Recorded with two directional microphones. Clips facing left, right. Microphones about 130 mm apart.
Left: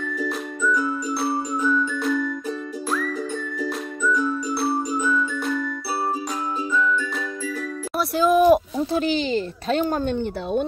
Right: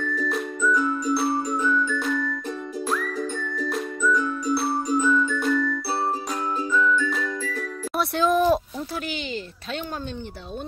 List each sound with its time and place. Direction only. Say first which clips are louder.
0.2 s music: left 1 dB; centre (ahead or behind)
3.5 s music: even; 5° left (ahead or behind)
6.9 s music: right 1 dB; centre (ahead or behind)
8.0 s speech: left 3 dB; 5° left (ahead or behind)
8.9 s speech: left 10 dB; 30° left (ahead or behind); by 10.7 s 60° left (ahead or behind)